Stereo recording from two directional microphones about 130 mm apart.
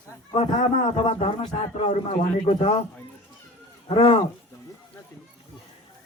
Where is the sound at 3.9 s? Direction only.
45° left (ahead or behind).